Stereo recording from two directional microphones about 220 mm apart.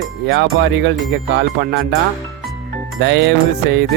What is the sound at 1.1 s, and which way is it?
Speech, 55° right (ahead or behind).